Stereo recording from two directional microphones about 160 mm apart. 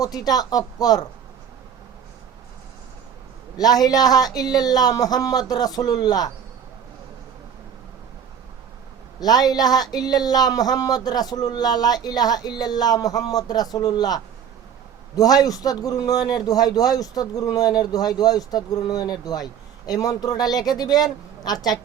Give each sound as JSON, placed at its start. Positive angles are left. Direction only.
{"t": 0.0, "sound": "speech", "side_deg": 25}
{"t": 3.6, "sound": "speech", "side_deg": 25}
{"t": 9.2, "sound": "speech", "side_deg": 25}